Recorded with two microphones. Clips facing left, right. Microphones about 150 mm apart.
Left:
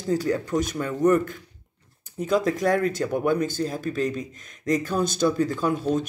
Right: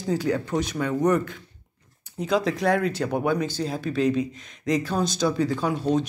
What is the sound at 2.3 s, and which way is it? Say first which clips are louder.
A man's voice: left 1 dB; 45° left (ahead or behind).